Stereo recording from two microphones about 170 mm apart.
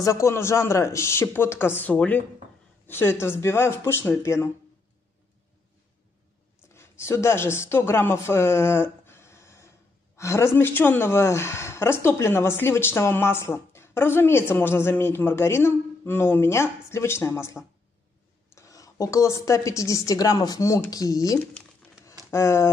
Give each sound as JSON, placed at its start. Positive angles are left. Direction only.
{"t": 0.0, "sound": "speech", "side_deg": 15}
{"t": 6.7, "sound": "speech", "side_deg": 15}
{"t": 18.5, "sound": "a sound", "side_deg": 20}
{"t": 19.4, "sound": "a woman's voice", "side_deg": 20}